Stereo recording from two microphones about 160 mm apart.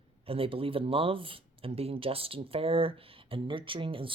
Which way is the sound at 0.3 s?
35° right (ahead or behind).